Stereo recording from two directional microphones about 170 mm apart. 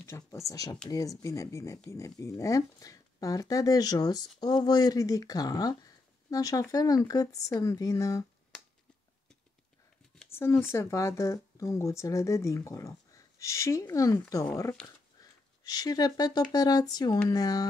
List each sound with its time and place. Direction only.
0.0 s speech: 15° left (ahead or behind)
10.6 s speech: 15° left (ahead or behind)
15.1 s a sound: 25° left (ahead or behind)
16.5 s speech: 20° left (ahead or behind)